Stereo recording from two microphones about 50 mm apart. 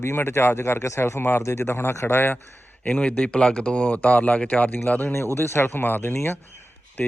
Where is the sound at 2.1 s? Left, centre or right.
Left.